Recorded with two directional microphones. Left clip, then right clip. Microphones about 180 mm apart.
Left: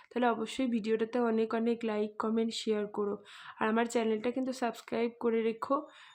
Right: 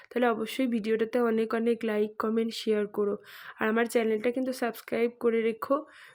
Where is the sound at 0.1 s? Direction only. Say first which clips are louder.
Right 4 dB; 15° right (ahead or behind).